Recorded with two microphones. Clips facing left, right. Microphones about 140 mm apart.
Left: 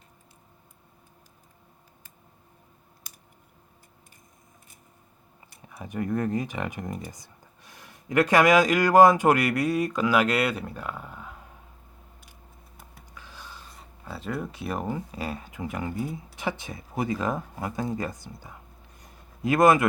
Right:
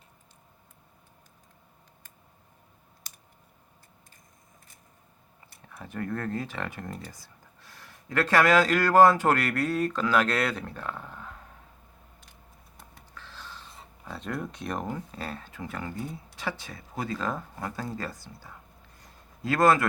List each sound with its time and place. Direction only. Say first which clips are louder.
5.6 s speech: left 4 dB; 15° left (ahead or behind)
12.7 s speech: even; 10° left (ahead or behind)